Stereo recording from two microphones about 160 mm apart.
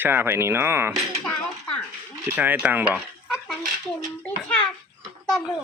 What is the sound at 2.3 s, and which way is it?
Speech, 10° right (ahead or behind).